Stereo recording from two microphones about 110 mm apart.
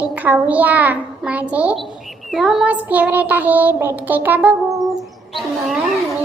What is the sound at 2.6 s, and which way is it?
Child singing, 15° right (ahead or behind).